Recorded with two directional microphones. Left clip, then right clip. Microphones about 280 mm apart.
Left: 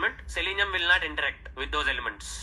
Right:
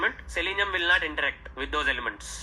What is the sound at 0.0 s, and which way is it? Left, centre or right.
A man's voice, centre.